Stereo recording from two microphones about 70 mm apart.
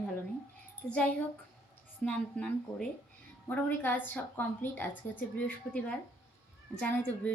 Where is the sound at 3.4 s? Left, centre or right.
Left.